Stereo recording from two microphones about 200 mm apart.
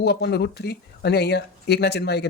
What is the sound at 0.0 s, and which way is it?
Speech, 55° left (ahead or behind).